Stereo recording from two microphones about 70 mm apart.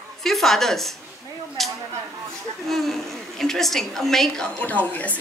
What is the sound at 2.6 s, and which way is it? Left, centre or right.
A child's voice, centre.